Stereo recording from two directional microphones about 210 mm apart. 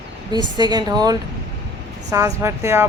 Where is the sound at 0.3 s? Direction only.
20° right (ahead or behind).